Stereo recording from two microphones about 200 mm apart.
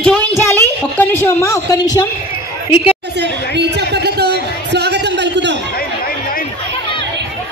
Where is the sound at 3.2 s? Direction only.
55° right (ahead or behind).